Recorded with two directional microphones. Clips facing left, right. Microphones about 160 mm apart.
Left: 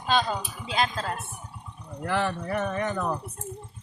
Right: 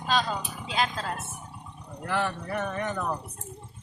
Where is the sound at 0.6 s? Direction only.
Centre (ahead or behind).